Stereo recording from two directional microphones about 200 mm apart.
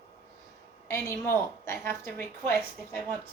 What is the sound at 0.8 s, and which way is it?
A woman's voice, 15° left (ahead or behind).